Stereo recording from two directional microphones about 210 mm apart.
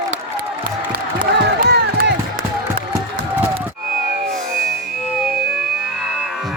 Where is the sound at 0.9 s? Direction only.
50° right (ahead or behind).